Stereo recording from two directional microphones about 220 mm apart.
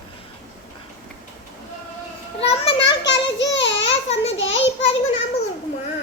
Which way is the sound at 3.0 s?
55° left (ahead or behind).